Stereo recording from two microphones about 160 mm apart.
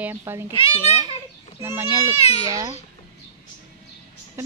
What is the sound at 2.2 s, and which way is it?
Speech, 40° left (ahead or behind).